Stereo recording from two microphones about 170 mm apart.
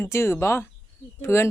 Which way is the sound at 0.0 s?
15° left (ahead or behind).